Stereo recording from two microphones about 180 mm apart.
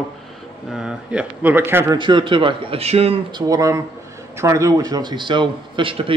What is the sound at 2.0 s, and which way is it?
A man's voice, 25° right (ahead or behind).